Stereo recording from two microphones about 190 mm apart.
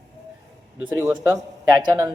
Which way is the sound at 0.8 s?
20° right (ahead or behind).